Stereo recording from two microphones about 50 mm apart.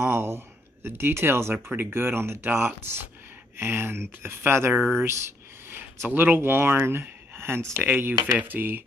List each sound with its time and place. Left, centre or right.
0.0 s speech: right
5.7 s a sound: right
6.0 s speech: right
7.9 s speech: right